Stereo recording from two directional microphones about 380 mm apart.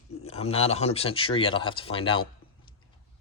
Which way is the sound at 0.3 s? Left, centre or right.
Centre.